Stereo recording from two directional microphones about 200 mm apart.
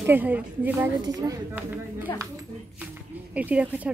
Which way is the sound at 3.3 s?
5° right (ahead or behind).